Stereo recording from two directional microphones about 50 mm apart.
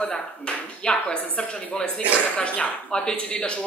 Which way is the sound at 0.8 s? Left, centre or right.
Left.